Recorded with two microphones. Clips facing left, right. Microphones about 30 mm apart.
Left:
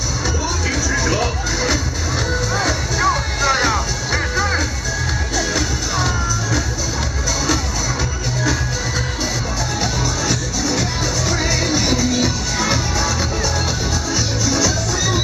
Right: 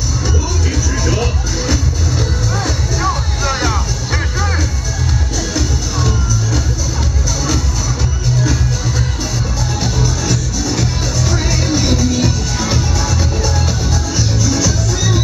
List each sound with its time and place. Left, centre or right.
1.0 s music: centre
2.5 s music: left
3.1 s music: centre
5.5 s music: left
9.8 s music: centre